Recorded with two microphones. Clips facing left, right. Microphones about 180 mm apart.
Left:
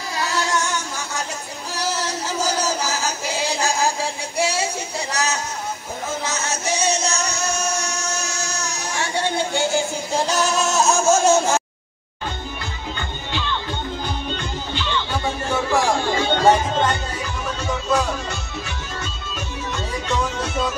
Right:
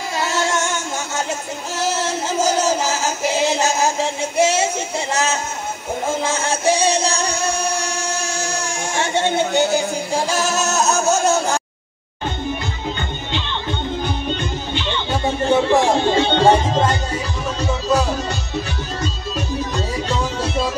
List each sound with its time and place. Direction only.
0.2 s music: 25° right (ahead or behind)
5.1 s speech: 25° right (ahead or behind)
6.0 s music: 30° right (ahead or behind)
8.9 s a sound: 25° right (ahead or behind)
10.2 s singing: 5° right (ahead or behind)
11.1 s a sound: centre (ahead or behind)
13.3 s music: 20° right (ahead or behind)
19.7 s music: 30° right (ahead or behind)